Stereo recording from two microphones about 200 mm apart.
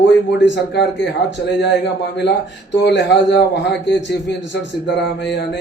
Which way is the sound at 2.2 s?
60° left (ahead or behind).